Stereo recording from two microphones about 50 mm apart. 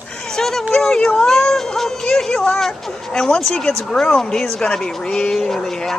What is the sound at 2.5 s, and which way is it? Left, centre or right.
Speech, centre.